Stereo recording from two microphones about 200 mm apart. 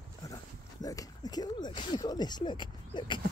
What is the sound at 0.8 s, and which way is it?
Speech, 20° left (ahead or behind).